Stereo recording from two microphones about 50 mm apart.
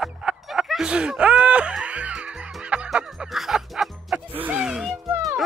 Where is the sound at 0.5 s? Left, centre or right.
Centre; by 2.9 s right.